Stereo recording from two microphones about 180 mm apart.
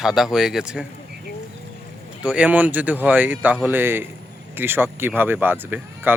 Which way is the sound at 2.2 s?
5° right (ahead or behind).